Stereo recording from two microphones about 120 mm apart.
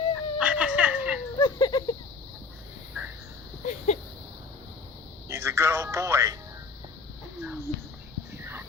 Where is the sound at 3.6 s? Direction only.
85° left.